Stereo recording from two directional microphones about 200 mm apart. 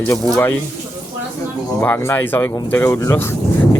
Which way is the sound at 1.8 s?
10° left (ahead or behind).